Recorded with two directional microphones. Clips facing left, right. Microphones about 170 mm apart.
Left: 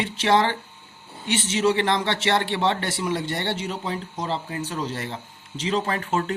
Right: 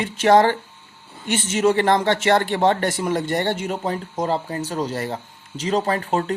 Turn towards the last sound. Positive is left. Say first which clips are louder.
# right 3 dB
turn(degrees=-35)  # may be behind; listen again after turning